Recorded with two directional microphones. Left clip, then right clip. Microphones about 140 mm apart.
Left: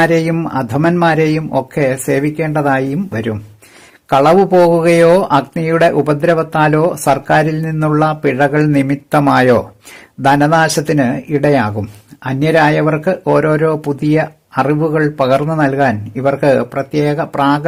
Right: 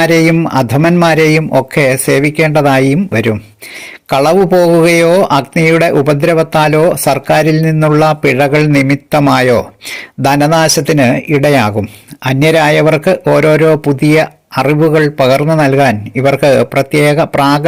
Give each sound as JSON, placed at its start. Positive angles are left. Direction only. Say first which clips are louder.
{"t": 0.2, "sound": "speech", "louder": "right 7 dB", "side_deg": -15}